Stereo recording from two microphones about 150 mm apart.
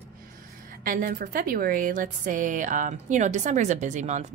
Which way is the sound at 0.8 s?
70° right (ahead or behind).